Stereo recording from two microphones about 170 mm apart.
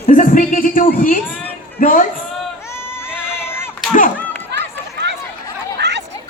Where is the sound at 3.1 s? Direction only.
15° left (ahead or behind).